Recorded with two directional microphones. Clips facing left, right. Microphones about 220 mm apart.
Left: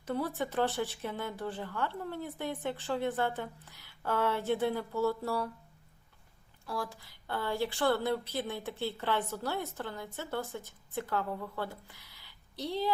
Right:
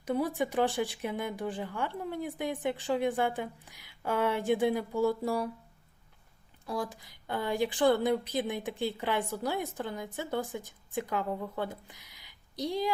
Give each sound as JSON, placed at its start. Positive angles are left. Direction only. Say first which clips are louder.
{"t": 0.0, "sound": "speech", "louder": "right 4 dB", "side_deg": -15}
{"t": 6.7, "sound": "speech", "louder": "right 3 dB", "side_deg": -20}